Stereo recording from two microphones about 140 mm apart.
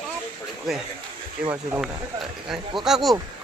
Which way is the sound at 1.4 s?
10° right (ahead or behind).